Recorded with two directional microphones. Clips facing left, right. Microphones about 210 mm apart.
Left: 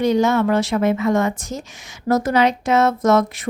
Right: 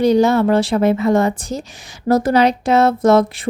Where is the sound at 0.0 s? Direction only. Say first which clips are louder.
Right 4 dB; 35° right (ahead or behind).